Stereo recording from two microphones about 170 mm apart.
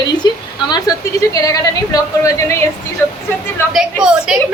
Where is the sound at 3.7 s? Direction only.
5° right (ahead or behind).